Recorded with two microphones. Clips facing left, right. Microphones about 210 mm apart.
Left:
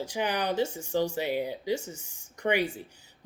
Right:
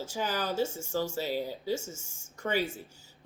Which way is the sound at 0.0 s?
15° left (ahead or behind).